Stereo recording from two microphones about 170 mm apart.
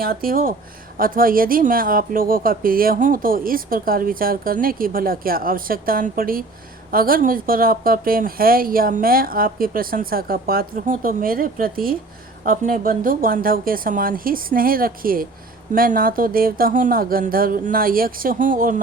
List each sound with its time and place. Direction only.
0.0 s speech: 60° right (ahead or behind)